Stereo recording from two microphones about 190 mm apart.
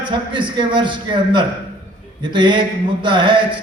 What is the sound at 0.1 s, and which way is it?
A man's voice, 25° right (ahead or behind).